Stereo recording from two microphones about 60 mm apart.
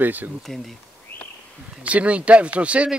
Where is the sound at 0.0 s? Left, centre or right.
Right.